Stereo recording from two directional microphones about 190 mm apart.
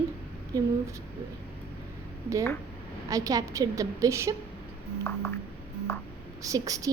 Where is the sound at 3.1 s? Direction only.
20° right (ahead or behind).